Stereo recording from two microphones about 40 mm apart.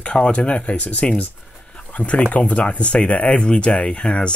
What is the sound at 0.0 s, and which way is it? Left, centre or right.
Speech, left.